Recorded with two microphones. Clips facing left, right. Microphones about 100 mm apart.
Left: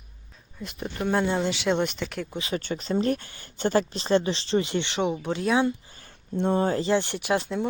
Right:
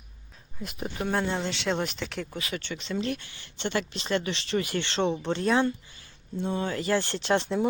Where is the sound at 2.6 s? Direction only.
40° left (ahead or behind); by 5.7 s 5° left (ahead or behind).